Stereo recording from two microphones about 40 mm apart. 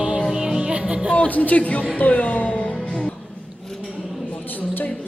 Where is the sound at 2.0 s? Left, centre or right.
Left.